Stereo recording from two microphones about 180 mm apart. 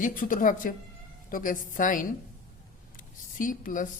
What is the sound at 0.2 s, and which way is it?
Speech, 50° left (ahead or behind).